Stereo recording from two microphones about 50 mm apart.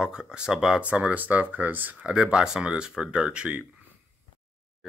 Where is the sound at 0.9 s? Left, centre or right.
Right.